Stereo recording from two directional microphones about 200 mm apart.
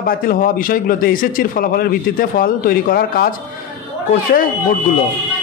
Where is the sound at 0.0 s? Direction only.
45° left (ahead or behind).